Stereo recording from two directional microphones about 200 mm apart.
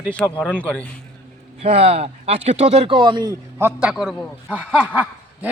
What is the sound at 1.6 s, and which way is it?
Speech, 30° right (ahead or behind).